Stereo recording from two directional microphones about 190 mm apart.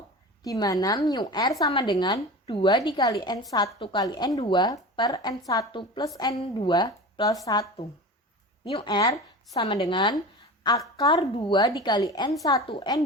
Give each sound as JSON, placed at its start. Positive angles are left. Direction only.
{"t": 0.4, "sound": "a woman's voice", "side_deg": 20}